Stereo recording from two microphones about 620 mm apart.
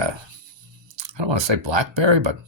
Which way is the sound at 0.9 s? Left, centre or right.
Right.